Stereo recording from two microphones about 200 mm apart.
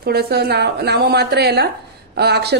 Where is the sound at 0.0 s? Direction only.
50° right (ahead or behind).